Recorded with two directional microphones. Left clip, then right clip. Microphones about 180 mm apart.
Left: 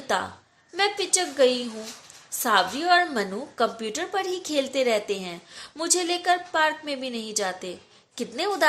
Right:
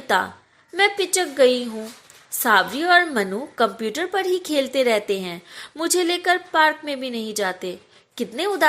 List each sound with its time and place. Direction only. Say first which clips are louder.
0.1 s a woman's voice: right 6 dB; 20° right (ahead or behind)